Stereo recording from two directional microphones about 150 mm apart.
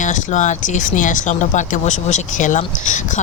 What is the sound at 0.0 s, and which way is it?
Speech, 55° left (ahead or behind).